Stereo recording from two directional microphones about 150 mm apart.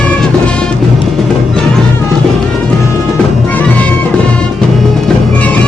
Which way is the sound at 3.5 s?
10° left (ahead or behind).